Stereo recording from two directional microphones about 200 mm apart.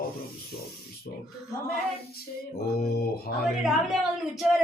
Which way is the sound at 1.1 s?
50° left (ahead or behind).